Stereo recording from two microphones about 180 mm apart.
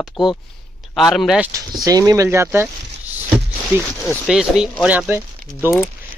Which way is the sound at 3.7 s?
10° right (ahead or behind).